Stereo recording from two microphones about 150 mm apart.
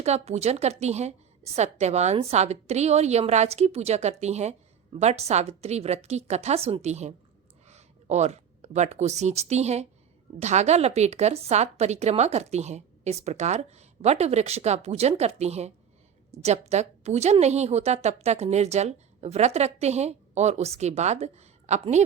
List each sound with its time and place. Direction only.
0.0 s a woman's voice: 45° right (ahead or behind)